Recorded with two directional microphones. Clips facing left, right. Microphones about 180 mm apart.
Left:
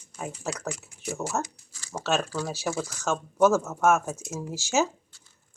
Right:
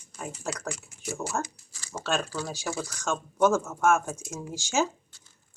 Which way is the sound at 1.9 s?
5° left (ahead or behind).